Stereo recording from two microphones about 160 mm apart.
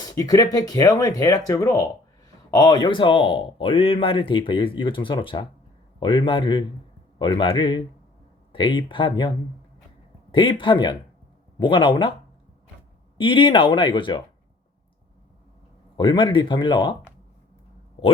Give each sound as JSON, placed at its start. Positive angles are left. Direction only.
{"t": 0.0, "sound": "speech", "side_deg": 25}
{"t": 10.3, "sound": "speech", "side_deg": 30}
{"t": 13.1, "sound": "speech", "side_deg": 30}
{"t": 16.0, "sound": "speech", "side_deg": 30}